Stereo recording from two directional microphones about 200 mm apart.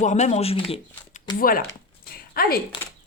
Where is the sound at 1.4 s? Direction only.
45° left (ahead or behind).